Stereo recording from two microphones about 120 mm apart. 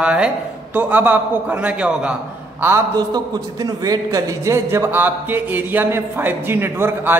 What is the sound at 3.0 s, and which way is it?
A man's voice, 30° right (ahead or behind).